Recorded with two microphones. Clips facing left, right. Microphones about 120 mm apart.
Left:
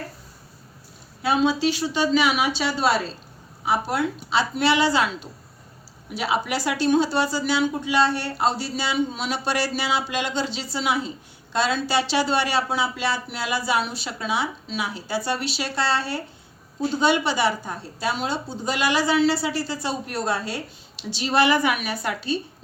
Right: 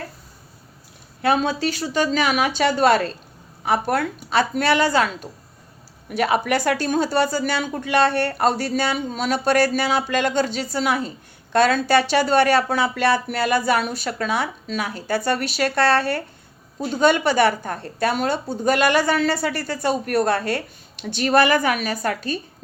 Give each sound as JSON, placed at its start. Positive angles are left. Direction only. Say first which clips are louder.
{"t": 1.2, "sound": "a woman's voice", "louder": "right 1 dB", "side_deg": -55}